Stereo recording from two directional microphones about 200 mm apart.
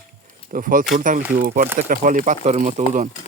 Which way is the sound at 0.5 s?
45° right (ahead or behind).